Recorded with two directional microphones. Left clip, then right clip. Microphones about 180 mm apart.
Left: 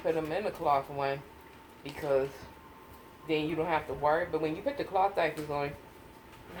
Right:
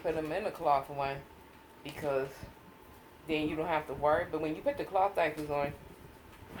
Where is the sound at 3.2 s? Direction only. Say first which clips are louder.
Left 2 dB; 25° right (ahead or behind).